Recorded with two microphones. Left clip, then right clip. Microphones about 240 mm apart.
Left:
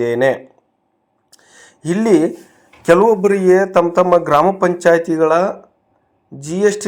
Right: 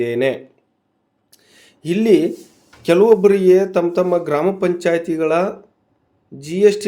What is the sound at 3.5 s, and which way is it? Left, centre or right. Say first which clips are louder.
Speech: left 2 dB; centre.